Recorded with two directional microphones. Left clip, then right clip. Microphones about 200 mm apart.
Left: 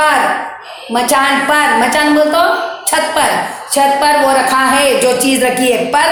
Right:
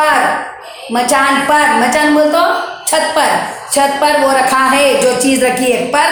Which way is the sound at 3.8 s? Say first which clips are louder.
Left 1 dB; 20° left (ahead or behind).